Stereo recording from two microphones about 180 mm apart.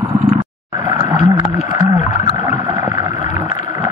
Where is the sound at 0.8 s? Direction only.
25° right (ahead or behind).